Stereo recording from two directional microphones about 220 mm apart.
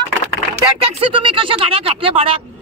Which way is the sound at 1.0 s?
25° right (ahead or behind).